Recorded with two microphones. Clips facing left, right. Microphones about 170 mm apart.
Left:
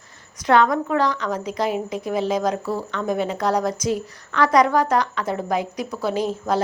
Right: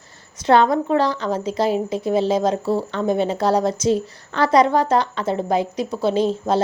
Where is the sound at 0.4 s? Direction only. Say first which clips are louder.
Right 2 dB; 30° right (ahead or behind).